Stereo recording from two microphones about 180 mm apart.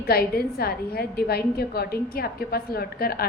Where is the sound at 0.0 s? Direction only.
60° left (ahead or behind).